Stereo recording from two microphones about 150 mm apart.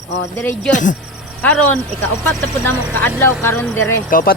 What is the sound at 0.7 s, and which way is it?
Cricket, 55° left (ahead or behind).